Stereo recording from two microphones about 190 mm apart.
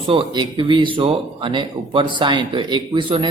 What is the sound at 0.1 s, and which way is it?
A man's voice, 25° right (ahead or behind).